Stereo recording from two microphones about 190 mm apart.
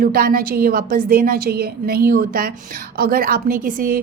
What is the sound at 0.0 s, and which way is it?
A woman's voice, 50° right (ahead or behind).